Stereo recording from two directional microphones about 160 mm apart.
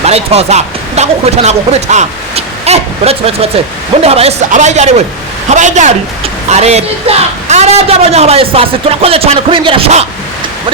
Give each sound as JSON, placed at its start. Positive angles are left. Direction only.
{"t": 0.0, "sound": "a woman's voice", "side_deg": -40}